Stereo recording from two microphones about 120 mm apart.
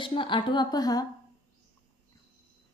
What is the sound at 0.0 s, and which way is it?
A woman's voice, 45° left (ahead or behind).